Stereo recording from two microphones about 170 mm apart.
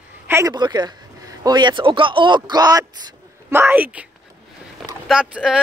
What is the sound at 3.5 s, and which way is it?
Speech, 10° right (ahead or behind).